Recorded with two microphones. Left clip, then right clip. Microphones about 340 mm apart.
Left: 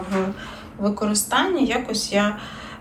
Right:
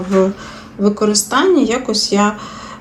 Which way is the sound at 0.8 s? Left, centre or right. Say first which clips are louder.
Right 9 dB; centre.